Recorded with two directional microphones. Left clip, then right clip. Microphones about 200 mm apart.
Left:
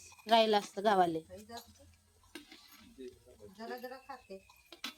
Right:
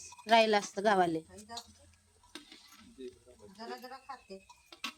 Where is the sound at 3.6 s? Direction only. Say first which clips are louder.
Even; 35° right (ahead or behind).